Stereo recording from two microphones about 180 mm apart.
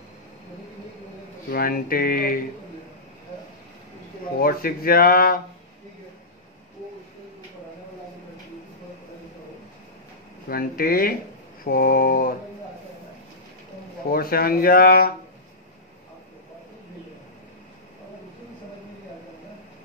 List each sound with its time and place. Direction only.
1.5 s speech: 55° left (ahead or behind)
4.4 s speech: 55° left (ahead or behind)
10.5 s speech: 55° left (ahead or behind)
14.1 s speech: 55° left (ahead or behind)